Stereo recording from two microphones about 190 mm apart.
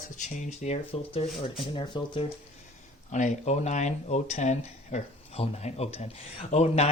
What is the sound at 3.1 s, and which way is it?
Speech, 40° left (ahead or behind).